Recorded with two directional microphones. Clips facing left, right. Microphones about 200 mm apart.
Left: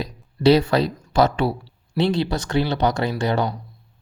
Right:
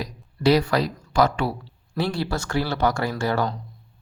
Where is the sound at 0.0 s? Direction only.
25° left (ahead or behind).